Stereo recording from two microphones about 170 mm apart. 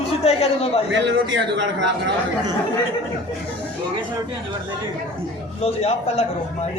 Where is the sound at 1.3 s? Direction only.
90° right.